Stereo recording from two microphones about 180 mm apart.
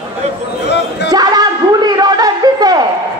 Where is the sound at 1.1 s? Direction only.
20° right (ahead or behind).